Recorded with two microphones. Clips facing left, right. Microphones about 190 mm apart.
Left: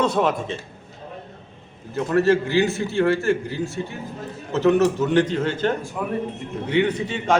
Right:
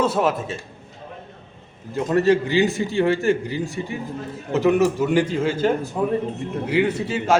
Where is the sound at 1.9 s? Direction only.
15° right (ahead or behind).